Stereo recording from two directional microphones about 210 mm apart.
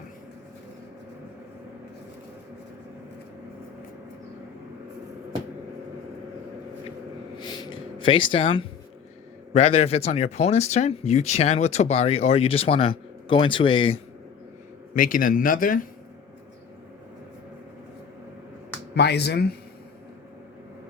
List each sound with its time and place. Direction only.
7.4 s a sound: 20° left (ahead or behind)
9.5 s speech: 30° left (ahead or behind)
14.9 s speech: 40° left (ahead or behind)
18.9 s speech: 50° left (ahead or behind)